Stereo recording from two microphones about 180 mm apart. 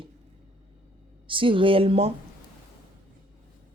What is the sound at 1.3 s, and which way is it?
Speech, 30° right (ahead or behind).